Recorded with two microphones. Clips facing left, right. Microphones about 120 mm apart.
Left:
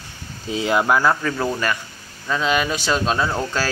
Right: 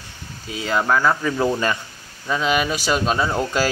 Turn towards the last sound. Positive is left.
turn(degrees=-15)  # may be behind; listen again after turning